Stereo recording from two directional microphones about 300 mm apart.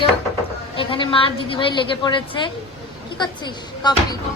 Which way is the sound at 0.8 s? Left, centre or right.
Centre.